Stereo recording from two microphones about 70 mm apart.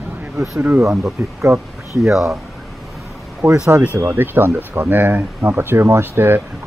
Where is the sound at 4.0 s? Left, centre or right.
Right.